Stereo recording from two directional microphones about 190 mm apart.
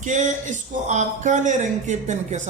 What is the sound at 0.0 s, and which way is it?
Speech, 40° right (ahead or behind).